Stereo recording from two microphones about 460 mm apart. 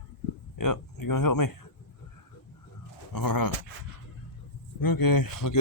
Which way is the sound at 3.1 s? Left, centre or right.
Left.